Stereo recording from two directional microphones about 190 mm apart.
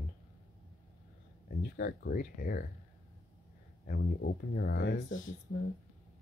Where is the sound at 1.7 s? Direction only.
60° left (ahead or behind).